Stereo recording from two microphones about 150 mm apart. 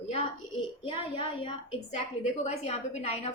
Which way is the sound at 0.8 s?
35° left (ahead or behind).